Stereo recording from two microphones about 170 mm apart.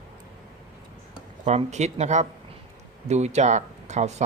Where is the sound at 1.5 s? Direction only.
40° right (ahead or behind).